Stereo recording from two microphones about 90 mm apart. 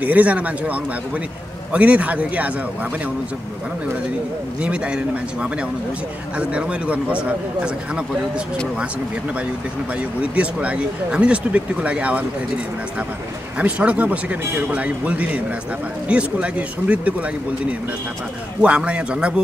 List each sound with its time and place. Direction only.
0.0 s speech: 15° right (ahead or behind)
4.6 s speech: 10° right (ahead or behind)
9.9 s speech: 15° right (ahead or behind)
13.6 s speech: 15° right (ahead or behind)
18.6 s speech: 15° right (ahead or behind)